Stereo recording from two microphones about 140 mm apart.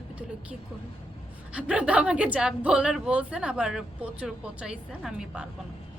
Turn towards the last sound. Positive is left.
turn(degrees=-5)  # may be behind; listen again after turning